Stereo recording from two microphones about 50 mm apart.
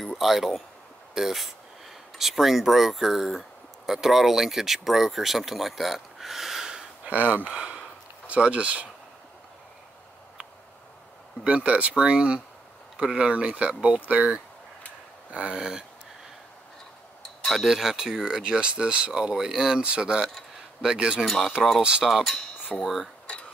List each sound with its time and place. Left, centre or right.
0.0 s speech: centre
1.1 s cutlery: centre
2.1 s speech: centre
7.1 s speech: right
7.4 s speech: right
11.4 s speech: right
17.4 s wind chime: centre
17.6 s speech: centre
21.6 s cutlery: centre
22.7 s speech: left